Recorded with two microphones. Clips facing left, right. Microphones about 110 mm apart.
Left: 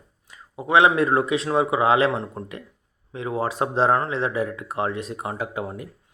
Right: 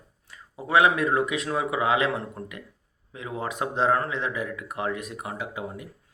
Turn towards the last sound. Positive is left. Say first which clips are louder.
# left 5 dB
turn(degrees=45)  # may be behind; listen again after turning